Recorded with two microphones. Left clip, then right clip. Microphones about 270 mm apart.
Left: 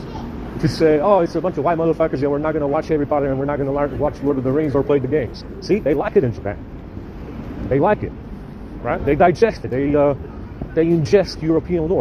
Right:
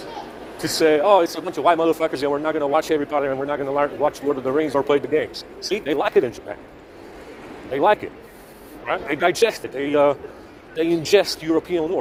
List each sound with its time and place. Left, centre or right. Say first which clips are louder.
0.6 s speech: left 1 dB; right
7.7 s speech: left 1 dB; right